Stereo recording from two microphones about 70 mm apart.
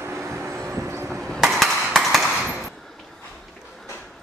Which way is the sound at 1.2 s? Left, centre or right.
Centre.